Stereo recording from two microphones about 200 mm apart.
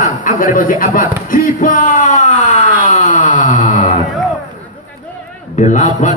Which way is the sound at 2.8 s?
40° left (ahead or behind).